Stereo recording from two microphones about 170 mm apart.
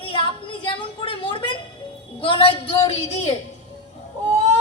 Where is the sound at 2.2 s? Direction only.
30° left (ahead or behind).